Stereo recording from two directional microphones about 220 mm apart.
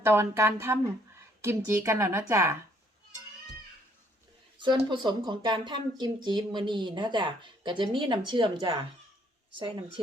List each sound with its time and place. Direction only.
0.0 s a woman's voice: 10° right (ahead or behind)
4.5 s speech: 20° right (ahead or behind)